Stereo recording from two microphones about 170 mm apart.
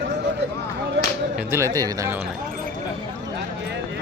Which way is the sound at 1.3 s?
15° right (ahead or behind).